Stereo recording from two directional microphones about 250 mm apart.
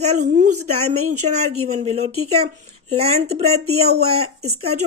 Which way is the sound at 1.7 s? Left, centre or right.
Right.